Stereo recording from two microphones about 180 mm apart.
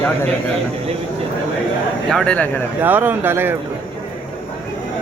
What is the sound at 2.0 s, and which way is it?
Speech, 5° left (ahead or behind).